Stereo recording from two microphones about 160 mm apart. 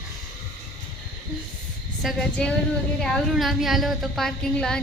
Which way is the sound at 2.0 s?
Centre (ahead or behind).